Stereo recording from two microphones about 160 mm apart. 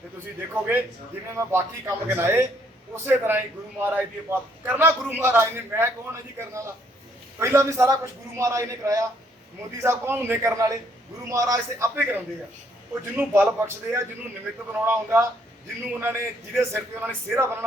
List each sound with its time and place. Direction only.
0.5 s a man's voice: 10° right (ahead or behind)